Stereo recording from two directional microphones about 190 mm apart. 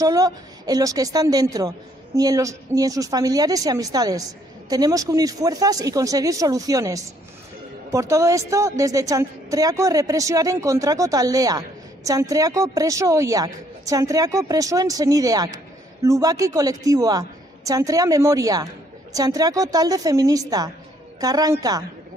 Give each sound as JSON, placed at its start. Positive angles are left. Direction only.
{"t": 0.0, "sound": "a woman's voice", "side_deg": -20}